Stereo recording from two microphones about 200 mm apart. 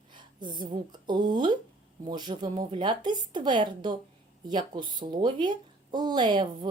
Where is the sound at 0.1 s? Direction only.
20° right (ahead or behind).